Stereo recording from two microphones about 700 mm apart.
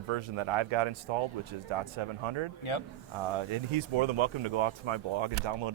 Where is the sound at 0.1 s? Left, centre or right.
Right.